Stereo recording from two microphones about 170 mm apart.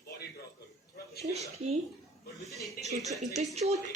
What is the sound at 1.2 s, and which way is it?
Speech, 40° right (ahead or behind).